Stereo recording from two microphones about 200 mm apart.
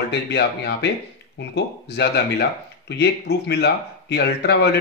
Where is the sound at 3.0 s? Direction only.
55° left (ahead or behind).